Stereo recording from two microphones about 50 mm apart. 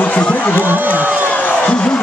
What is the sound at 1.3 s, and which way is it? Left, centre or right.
Music, left.